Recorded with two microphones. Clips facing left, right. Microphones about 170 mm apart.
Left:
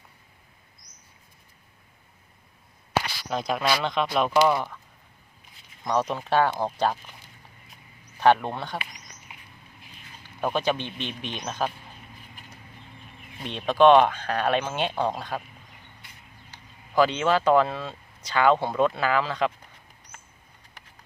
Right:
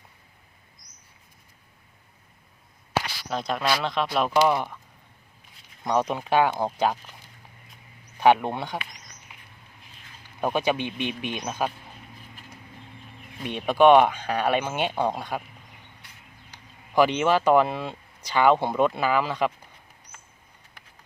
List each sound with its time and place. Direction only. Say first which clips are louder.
3.2 s speech: even; centre (ahead or behind); by 4.8 s 15° right (ahead or behind)
5.8 s speech: right 1 dB; 10° right (ahead or behind)
8.2 s speech: right 1 dB; 10° right (ahead or behind)
10.4 s speech: right 1 dB; 10° right (ahead or behind)
13.4 s speech: even; 10° right (ahead or behind)
16.5 s speech: right 1 dB; 10° right (ahead or behind)